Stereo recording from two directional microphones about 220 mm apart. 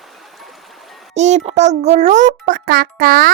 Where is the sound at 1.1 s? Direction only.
30° right (ahead or behind).